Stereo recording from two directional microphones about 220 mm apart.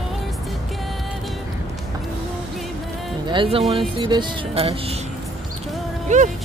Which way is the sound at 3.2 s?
20° right (ahead or behind).